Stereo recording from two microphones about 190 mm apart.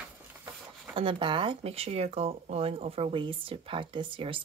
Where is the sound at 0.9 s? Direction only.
25° right (ahead or behind).